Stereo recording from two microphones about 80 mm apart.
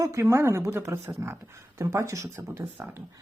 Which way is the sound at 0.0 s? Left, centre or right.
Right.